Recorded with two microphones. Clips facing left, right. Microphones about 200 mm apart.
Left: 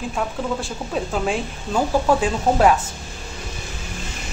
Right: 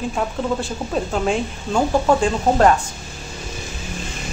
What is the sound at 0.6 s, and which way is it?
Speech, centre (ahead or behind).